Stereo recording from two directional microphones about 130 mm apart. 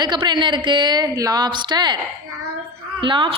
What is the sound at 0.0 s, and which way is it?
A woman's voice, 35° right (ahead or behind).